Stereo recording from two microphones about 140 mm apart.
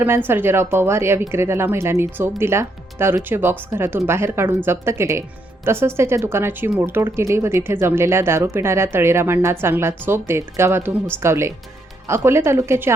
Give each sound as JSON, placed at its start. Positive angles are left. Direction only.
{"t": 0.0, "sound": "a woman's voice", "side_deg": -15}